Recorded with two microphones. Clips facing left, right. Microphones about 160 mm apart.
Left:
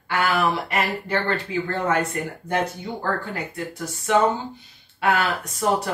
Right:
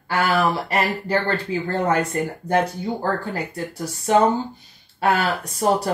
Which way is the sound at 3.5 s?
35° right (ahead or behind).